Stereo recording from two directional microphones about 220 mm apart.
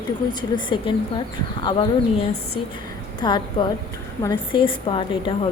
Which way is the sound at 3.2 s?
20° left (ahead or behind).